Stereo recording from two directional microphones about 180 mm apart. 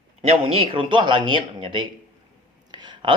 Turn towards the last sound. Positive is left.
turn(degrees=-25)  # may be behind; listen again after turning